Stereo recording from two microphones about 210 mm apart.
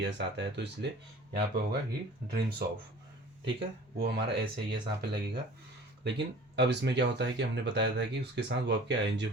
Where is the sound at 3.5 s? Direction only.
50° right (ahead or behind).